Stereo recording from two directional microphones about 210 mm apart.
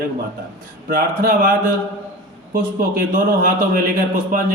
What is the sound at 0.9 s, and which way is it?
A man's voice, 45° right (ahead or behind).